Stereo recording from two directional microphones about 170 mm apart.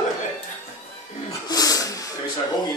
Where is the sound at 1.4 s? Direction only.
20° left (ahead or behind).